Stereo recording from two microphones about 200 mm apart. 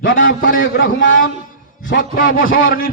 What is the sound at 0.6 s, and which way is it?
Speech, 70° left (ahead or behind).